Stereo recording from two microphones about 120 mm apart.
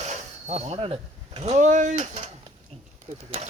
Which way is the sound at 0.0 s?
70° right (ahead or behind).